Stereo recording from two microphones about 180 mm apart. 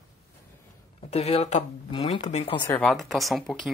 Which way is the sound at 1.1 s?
35° left (ahead or behind).